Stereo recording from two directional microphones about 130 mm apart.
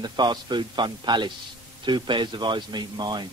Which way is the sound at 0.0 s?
35° right (ahead or behind).